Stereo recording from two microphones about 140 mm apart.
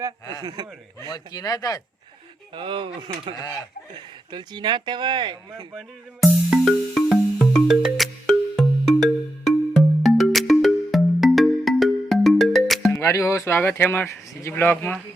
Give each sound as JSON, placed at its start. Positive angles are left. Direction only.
{"t": 0.4, "sound": "speech", "side_deg": -30}
{"t": 1.0, "sound": "speech", "side_deg": 25}
{"t": 2.6, "sound": "speech", "side_deg": -35}
{"t": 3.3, "sound": "speech", "side_deg": 20}
{"t": 3.9, "sound": "speech", "side_deg": -35}
{"t": 5.7, "sound": "music", "side_deg": 0}
{"t": 12.9, "sound": "speech", "side_deg": 20}